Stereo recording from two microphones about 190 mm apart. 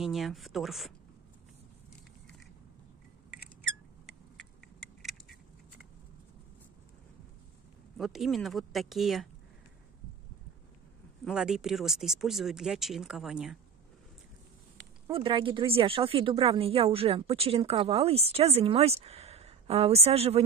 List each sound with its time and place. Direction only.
0.0 s speech: centre (ahead or behind)
5.0 s a sound: centre (ahead or behind)
8.0 s speech: centre (ahead or behind)
11.2 s speech: 5° right (ahead or behind)
15.1 s speech: 25° right (ahead or behind)